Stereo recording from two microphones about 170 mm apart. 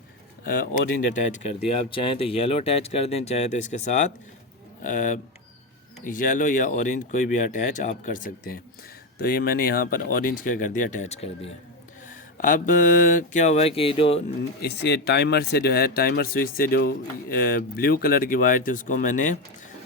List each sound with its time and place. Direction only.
1.1 s speech: 40° left (ahead or behind)
9.1 s speech: 65° left (ahead or behind); by 11.5 s 40° left (ahead or behind)
12.4 s speech: 50° left (ahead or behind); by 14.2 s 35° left (ahead or behind)
14.6 s speech: 80° left; by 19.4 s 50° left (ahead or behind)